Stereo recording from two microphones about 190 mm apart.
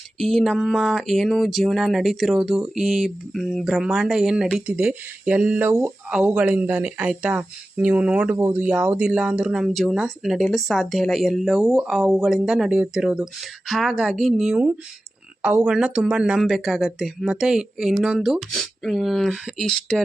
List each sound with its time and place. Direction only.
0.2 s speech: centre (ahead or behind)